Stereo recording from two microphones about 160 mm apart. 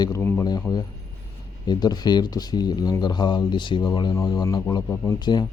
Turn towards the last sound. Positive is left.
turn(degrees=25)  # may be behind; listen again after turning